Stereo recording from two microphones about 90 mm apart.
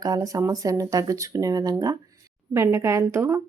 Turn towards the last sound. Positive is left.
turn(degrees=-30)  # may be behind; listen again after turning